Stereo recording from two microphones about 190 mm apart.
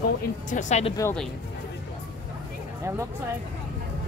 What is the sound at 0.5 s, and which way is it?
Speech, 40° left (ahead or behind).